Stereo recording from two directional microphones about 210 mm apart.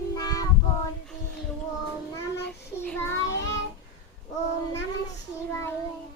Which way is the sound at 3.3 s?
55° left (ahead or behind).